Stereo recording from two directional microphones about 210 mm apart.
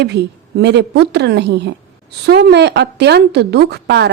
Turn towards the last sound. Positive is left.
turn(degrees=-55)  # may be behind; listen again after turning